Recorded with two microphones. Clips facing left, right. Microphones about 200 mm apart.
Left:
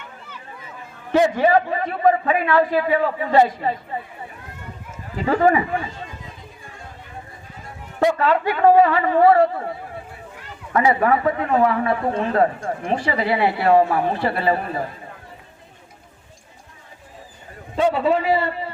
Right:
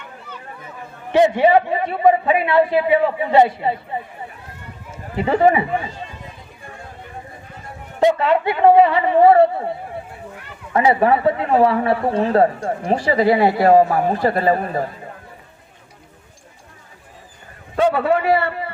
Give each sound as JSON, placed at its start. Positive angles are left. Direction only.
{"t": 1.1, "sound": "a man's voice", "side_deg": -20}
{"t": 5.1, "sound": "a man's voice", "side_deg": -20}
{"t": 8.0, "sound": "a man's voice", "side_deg": -20}
{"t": 10.8, "sound": "speech", "side_deg": -25}
{"t": 17.9, "sound": "a man's voice", "side_deg": -60}